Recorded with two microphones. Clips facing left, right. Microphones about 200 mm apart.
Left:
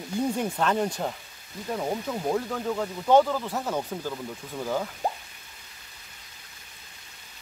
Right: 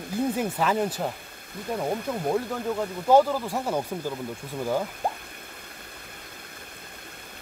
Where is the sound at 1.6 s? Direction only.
55° right (ahead or behind).